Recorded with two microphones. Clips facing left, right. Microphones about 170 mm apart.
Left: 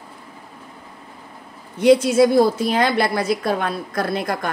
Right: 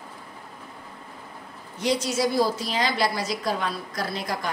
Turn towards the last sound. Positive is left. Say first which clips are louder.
# left 6 dB
turn(degrees=55)  # may be behind; listen again after turning